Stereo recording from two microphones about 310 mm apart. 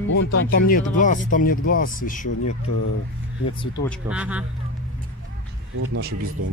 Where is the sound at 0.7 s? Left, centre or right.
Left.